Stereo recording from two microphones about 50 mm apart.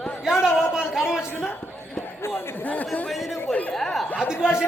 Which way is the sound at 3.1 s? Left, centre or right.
Centre.